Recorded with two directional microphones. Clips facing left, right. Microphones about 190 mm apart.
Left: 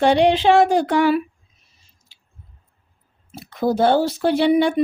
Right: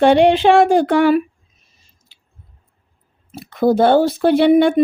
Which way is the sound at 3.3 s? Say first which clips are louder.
Right 5 dB; 55° right (ahead or behind).